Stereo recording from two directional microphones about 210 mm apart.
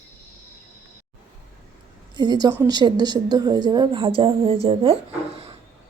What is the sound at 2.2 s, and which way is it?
A woman's voice, 20° right (ahead or behind).